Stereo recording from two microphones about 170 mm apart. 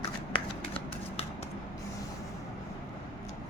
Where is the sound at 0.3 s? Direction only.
30° left (ahead or behind).